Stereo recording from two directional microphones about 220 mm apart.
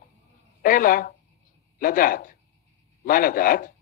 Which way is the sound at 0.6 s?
40° left (ahead or behind).